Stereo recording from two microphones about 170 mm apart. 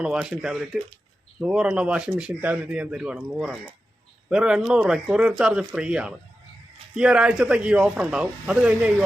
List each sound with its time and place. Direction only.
0.0 s speech: 5° right (ahead or behind)